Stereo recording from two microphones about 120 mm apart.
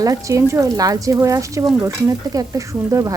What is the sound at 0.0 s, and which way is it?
Speech, 30° right (ahead or behind).